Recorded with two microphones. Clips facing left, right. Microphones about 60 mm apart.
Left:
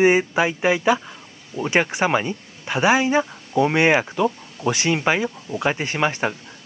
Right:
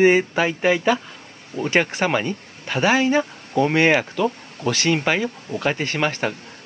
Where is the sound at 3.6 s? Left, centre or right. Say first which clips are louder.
Even; centre.